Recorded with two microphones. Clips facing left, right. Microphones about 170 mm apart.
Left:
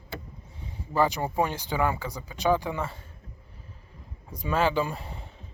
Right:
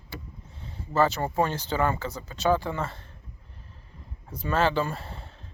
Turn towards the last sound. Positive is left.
turn(degrees=15)  # may be behind; listen again after turning